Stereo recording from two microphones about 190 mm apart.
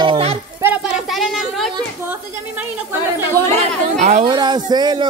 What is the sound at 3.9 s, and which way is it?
Speech, 40° right (ahead or behind).